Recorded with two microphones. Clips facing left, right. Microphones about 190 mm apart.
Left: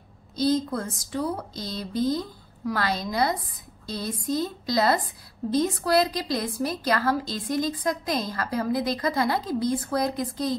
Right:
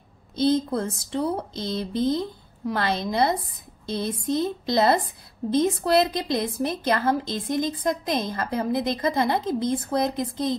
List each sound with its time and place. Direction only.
1.1 s a woman's voice: 25° right (ahead or behind)